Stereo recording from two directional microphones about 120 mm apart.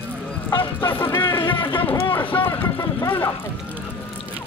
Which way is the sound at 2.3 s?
20° left (ahead or behind).